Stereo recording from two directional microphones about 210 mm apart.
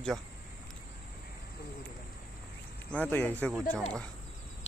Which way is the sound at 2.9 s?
10° left (ahead or behind).